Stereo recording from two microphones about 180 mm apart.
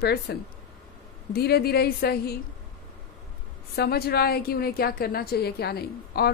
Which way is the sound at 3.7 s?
60° left (ahead or behind).